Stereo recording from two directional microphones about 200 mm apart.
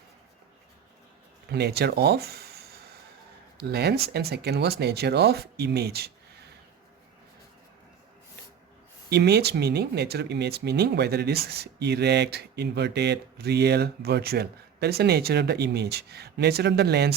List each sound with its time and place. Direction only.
1.5 s speech: 55° right (ahead or behind)
3.6 s speech: 55° right (ahead or behind)
9.0 s speech: 55° right (ahead or behind)